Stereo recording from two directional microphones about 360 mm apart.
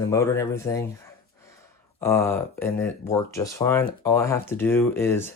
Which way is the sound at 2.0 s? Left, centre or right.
Centre.